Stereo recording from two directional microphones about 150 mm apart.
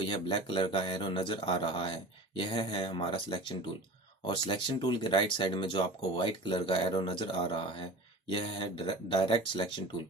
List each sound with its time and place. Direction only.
0.0 s speech: 35° left (ahead or behind)